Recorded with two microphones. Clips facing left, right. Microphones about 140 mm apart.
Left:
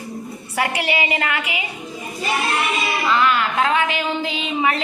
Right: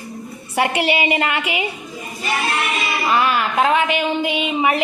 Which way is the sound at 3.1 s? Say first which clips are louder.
Right 1 dB; 20° right (ahead or behind).